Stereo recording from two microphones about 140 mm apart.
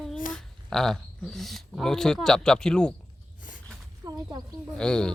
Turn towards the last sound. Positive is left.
turn(degrees=5)  # may be behind; listen again after turning